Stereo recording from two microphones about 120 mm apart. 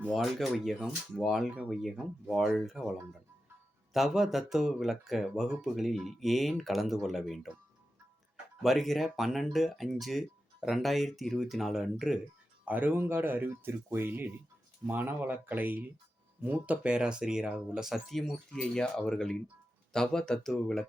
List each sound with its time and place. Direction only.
0.1 s speech: centre (ahead or behind)
8.6 s speech: centre (ahead or behind)
12.6 s speech: 15° right (ahead or behind); by 20.8 s 5° left (ahead or behind)